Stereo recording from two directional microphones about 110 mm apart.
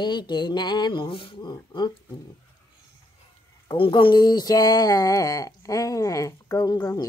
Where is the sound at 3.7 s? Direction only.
50° left (ahead or behind).